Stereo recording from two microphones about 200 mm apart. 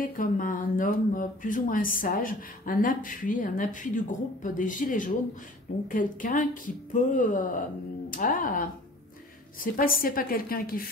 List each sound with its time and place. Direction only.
0.2 s speech: 45° left (ahead or behind)